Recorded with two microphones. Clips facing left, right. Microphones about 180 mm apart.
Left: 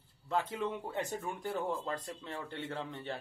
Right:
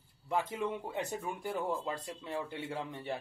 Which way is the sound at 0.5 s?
15° right (ahead or behind).